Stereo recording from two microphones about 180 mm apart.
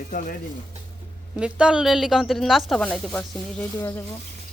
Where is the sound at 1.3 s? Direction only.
5° right (ahead or behind).